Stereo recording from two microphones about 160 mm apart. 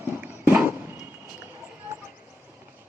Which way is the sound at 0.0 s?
15° right (ahead or behind).